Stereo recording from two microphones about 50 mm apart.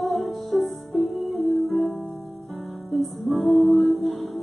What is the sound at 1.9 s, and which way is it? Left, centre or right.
Music, left.